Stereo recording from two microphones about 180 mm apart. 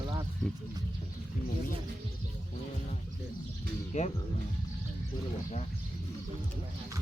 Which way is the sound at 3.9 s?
40° left (ahead or behind).